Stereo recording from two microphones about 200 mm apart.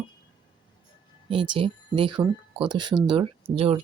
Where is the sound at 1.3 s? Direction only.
25° right (ahead or behind).